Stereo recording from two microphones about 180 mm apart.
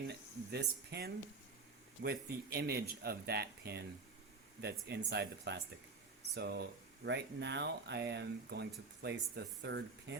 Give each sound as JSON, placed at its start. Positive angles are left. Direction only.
{"t": 0.1, "sound": "speech", "side_deg": -65}